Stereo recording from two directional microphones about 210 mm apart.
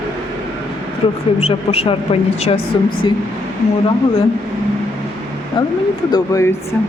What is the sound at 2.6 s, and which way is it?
Speech, 45° left (ahead or behind).